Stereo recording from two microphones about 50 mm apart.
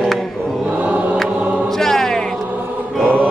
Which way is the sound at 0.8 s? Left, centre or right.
Right.